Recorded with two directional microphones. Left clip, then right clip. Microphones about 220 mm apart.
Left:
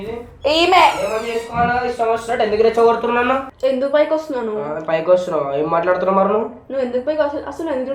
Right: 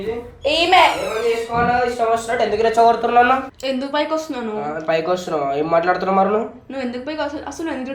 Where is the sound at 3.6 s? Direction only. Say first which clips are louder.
Left 7 dB; 40° right (ahead or behind).